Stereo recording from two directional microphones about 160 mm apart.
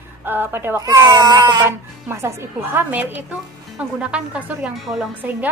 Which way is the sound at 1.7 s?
15° right (ahead or behind).